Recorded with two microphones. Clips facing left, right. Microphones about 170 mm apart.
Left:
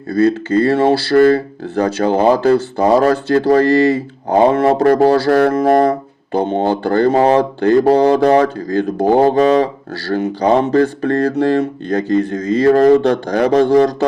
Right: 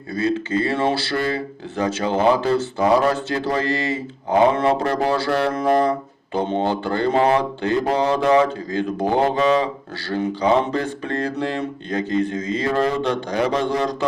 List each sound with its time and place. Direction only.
0.1 s speech: 40° left (ahead or behind)